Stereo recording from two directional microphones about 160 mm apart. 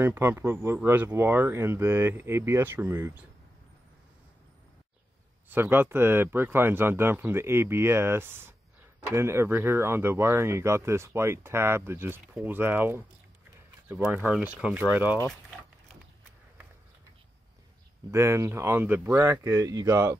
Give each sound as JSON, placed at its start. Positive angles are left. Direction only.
{"t": 0.0, "sound": "speech", "side_deg": -15}
{"t": 5.5, "sound": "speech", "side_deg": -15}
{"t": 18.1, "sound": "speech", "side_deg": -15}